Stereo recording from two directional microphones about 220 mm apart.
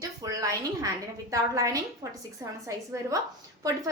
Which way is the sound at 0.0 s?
15° right (ahead or behind).